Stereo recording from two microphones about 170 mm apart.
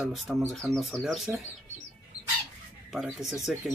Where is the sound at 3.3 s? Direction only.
Centre (ahead or behind).